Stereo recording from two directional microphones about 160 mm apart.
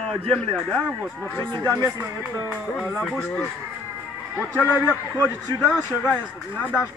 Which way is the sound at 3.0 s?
5° left (ahead or behind).